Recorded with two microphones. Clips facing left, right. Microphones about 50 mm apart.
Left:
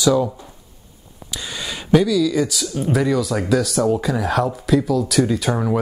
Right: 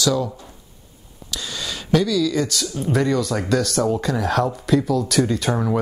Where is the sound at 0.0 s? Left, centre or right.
Centre.